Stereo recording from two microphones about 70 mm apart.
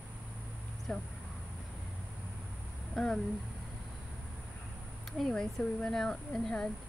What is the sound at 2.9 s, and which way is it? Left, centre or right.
Speech, centre.